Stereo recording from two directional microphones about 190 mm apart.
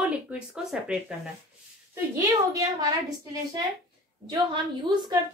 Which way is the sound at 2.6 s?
20° right (ahead or behind).